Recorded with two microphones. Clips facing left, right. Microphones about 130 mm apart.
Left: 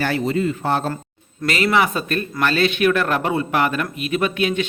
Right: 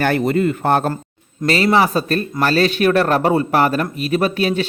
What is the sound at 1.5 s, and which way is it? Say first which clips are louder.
A man's voice: right 3 dB; 35° right (ahead or behind).